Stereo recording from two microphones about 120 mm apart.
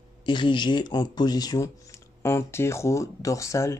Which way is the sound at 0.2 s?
40° left (ahead or behind).